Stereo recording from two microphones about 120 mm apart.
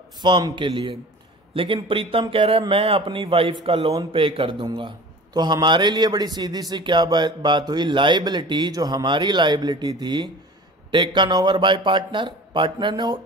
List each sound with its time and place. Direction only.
0.2 s a man's voice: 40° right (ahead or behind)